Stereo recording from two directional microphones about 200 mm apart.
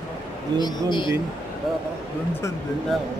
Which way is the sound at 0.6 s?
20° left (ahead or behind).